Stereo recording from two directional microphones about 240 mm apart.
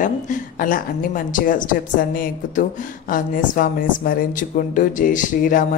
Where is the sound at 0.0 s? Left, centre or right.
Left.